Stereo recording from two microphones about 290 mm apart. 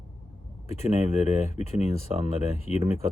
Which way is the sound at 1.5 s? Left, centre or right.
Left.